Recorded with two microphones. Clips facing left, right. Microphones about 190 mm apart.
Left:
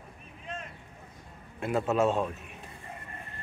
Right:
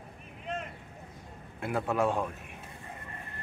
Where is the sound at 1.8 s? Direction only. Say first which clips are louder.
Left 2 dB; 20° left (ahead or behind).